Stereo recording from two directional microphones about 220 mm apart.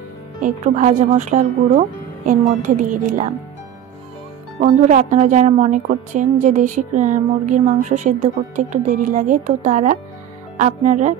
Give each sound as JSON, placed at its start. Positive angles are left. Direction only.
{"t": 0.4, "sound": "a woman's voice", "side_deg": -30}
{"t": 4.6, "sound": "a woman's voice", "side_deg": -35}